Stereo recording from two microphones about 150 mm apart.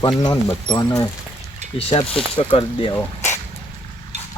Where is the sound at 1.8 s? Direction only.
40° left (ahead or behind).